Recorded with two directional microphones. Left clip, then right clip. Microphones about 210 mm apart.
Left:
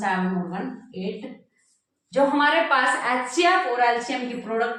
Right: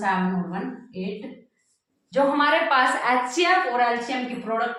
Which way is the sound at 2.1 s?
20° right (ahead or behind).